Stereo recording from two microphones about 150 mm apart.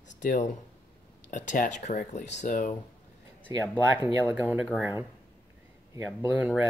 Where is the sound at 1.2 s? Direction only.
55° left (ahead or behind).